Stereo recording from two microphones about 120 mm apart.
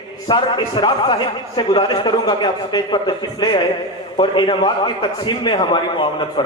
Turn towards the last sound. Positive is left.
turn(degrees=40)  # may be behind; listen again after turning